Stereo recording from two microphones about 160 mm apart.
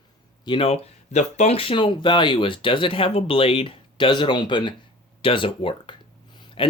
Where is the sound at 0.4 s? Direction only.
35° left (ahead or behind).